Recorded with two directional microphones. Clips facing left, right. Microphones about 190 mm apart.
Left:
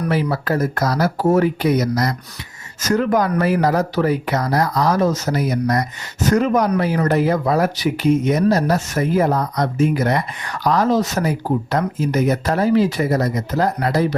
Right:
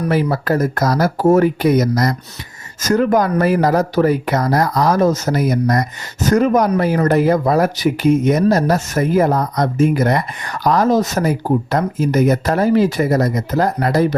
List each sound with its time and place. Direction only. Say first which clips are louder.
0.1 s speech: right 4 dB; 45° right (ahead or behind)